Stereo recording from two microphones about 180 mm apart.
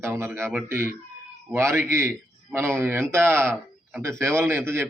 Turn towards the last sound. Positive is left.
turn(degrees=-15)  # may be behind; listen again after turning